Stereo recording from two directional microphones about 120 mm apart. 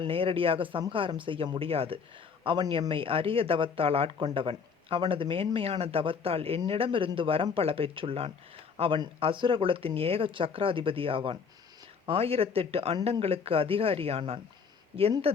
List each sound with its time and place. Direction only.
0.0 s speech: 50° right (ahead or behind)
9.2 s speech: 45° right (ahead or behind)